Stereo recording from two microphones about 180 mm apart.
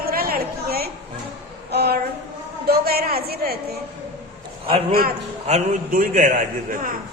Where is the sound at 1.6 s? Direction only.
65° right (ahead or behind).